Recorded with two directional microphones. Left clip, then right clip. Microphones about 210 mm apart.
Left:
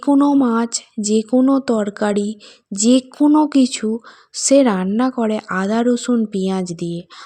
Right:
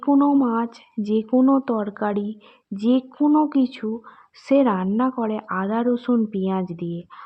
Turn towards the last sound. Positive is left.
turn(degrees=35)  # may be behind; listen again after turning